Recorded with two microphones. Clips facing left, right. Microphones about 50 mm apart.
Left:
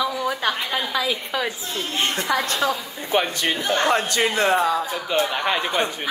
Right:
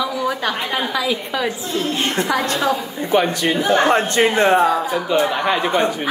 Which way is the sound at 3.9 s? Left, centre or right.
Right.